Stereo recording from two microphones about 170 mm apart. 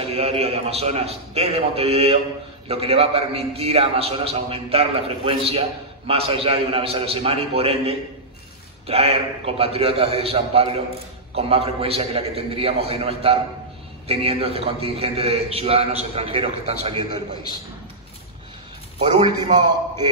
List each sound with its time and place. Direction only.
0.1 s a man's voice: 35° right (ahead or behind)
18.9 s a man's voice: 30° right (ahead or behind)